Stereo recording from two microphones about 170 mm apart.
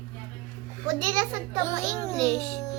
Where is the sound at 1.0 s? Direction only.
20° right (ahead or behind).